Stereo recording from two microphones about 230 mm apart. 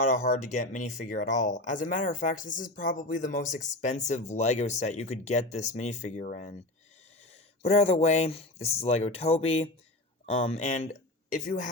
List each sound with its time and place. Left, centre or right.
0.1 s speech: left
7.6 s speech: left